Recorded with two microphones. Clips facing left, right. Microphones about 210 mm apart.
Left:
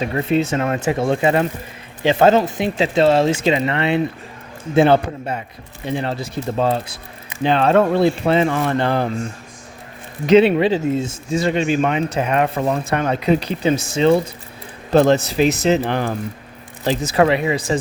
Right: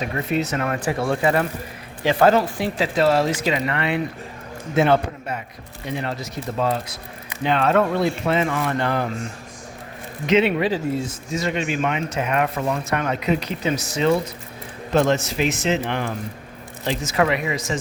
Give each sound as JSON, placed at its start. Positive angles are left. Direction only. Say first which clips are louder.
{"t": 0.0, "sound": "speech", "louder": "left 5 dB", "side_deg": 25}
{"t": 10.2, "sound": "speech", "louder": "left 6 dB", "side_deg": 35}